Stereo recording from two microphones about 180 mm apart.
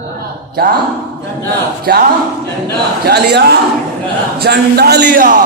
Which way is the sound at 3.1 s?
65° right (ahead or behind).